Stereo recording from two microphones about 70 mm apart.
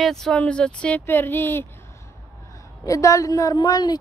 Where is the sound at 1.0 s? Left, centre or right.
Left.